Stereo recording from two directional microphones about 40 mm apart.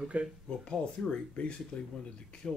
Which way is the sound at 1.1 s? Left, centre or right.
Left.